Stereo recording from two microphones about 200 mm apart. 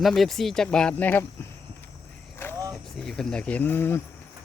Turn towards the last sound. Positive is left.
turn(degrees=10)  # may be behind; listen again after turning